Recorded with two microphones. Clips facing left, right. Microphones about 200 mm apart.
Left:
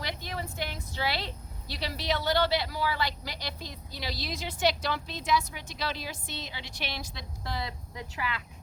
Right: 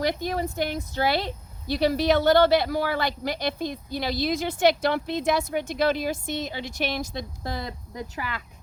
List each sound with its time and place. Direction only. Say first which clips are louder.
0.0 s speech: right 11 dB; 45° right (ahead or behind)